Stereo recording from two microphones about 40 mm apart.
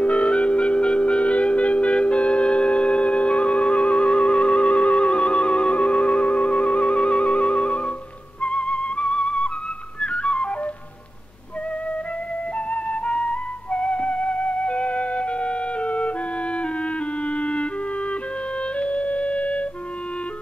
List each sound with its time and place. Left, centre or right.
0.0 s music: left
10.0 s flute: left
12.7 s music: left
17.3 s clarinet: left
18.8 s music: left